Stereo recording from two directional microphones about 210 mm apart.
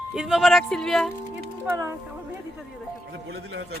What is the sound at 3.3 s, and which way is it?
Speech, 55° right (ahead or behind).